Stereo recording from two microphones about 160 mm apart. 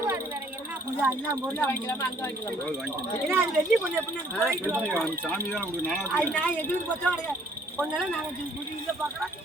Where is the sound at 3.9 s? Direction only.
15° right (ahead or behind).